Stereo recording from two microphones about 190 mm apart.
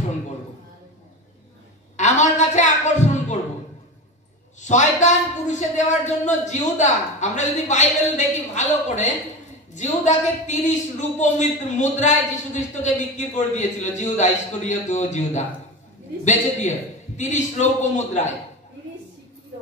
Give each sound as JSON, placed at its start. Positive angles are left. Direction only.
{"t": 2.0, "sound": "a sound", "side_deg": 40}
{"t": 4.6, "sound": "a woman's voice", "side_deg": 40}
{"t": 17.2, "sound": "a woman's voice", "side_deg": 40}